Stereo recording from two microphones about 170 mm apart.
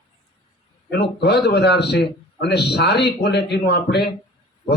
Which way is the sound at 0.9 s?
80° left.